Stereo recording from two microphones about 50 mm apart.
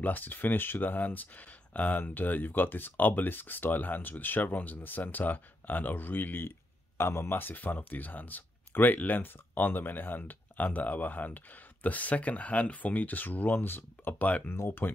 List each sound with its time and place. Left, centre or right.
0.0 s speech: left
7.0 s speech: left
14.2 s speech: left
14.5 s speech: left